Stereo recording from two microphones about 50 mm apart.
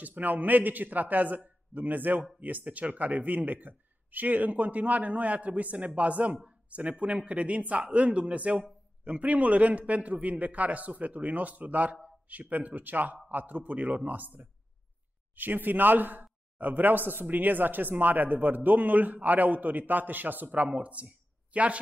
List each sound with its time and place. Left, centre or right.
0.0 s a man's voice: right